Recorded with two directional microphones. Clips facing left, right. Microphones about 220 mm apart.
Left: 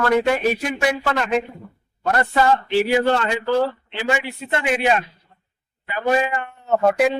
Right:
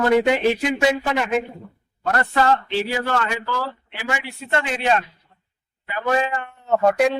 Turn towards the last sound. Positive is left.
turn(degrees=0)  # may be behind; listen again after turning